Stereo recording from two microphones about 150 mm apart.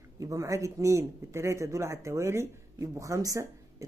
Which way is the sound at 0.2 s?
20° right (ahead or behind).